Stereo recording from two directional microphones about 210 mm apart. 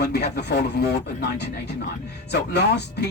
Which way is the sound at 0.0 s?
50° left (ahead or behind).